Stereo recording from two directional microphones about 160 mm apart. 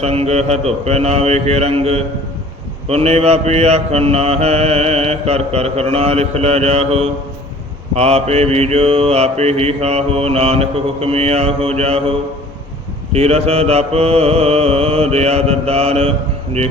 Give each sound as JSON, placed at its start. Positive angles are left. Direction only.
{"t": 0.0, "sound": "mantra", "side_deg": -40}
{"t": 13.1, "sound": "mantra", "side_deg": -40}